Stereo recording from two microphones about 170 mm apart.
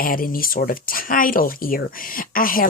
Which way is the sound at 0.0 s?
55° left (ahead or behind).